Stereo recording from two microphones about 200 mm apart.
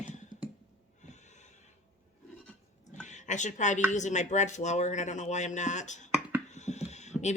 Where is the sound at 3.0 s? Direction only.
35° left (ahead or behind).